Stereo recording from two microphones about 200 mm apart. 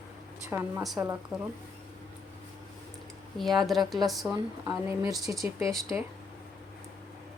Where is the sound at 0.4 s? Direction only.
15° right (ahead or behind).